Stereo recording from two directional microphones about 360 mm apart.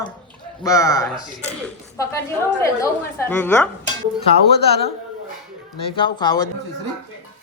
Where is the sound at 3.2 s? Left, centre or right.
Centre.